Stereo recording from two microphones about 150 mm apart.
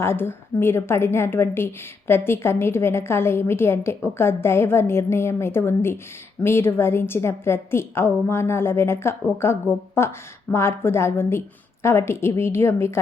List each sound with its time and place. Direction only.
0.0 s a woman's voice: 15° left (ahead or behind)